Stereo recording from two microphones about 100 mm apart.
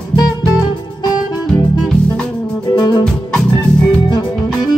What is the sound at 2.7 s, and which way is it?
Music, 45° left (ahead or behind).